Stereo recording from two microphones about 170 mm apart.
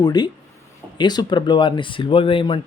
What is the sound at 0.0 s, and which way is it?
Speech, 25° left (ahead or behind).